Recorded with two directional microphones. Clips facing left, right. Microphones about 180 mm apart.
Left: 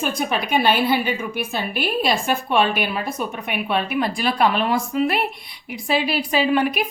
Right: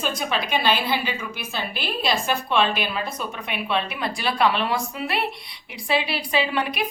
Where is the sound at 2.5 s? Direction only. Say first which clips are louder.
Left 3 dB; 55° left (ahead or behind).